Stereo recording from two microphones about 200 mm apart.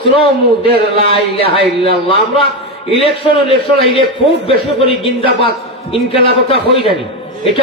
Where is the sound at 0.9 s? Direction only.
30° left (ahead or behind).